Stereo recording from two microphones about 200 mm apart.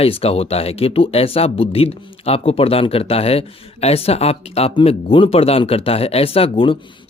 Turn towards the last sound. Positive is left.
turn(degrees=30)  # may be behind; listen again after turning